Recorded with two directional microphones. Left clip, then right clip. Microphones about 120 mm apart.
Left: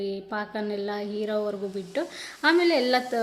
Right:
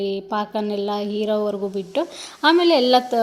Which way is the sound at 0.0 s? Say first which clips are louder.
Right 7 dB; 35° right (ahead or behind).